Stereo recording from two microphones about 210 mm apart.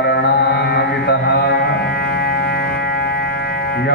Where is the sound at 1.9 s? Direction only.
50° left (ahead or behind).